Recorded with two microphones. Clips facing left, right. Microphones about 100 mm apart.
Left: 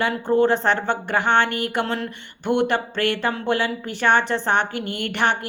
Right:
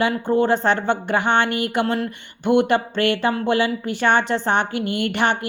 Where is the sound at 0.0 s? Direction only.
15° right (ahead or behind).